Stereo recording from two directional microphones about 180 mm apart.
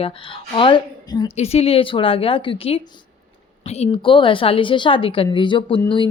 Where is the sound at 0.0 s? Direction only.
30° left (ahead or behind).